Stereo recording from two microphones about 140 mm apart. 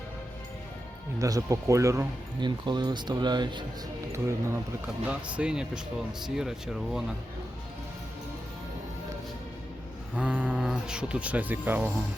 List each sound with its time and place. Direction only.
1.2 s speech: 25° right (ahead or behind)
2.4 s speech: 30° right (ahead or behind)
4.1 s speech: 20° right (ahead or behind)
5.0 s speech: 10° right (ahead or behind)
10.2 s speech: 10° right (ahead or behind)